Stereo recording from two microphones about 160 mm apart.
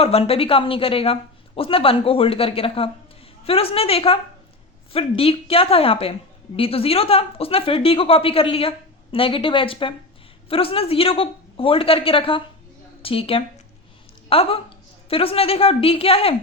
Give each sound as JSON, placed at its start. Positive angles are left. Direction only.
{"t": 0.0, "sound": "a woman's voice", "side_deg": 40}